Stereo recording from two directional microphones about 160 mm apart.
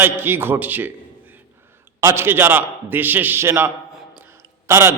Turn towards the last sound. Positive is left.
turn(degrees=-15)  # may be behind; listen again after turning